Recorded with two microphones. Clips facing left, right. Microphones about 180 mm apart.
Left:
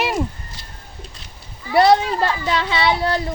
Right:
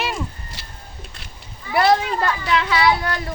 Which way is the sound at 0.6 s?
70° right (ahead or behind).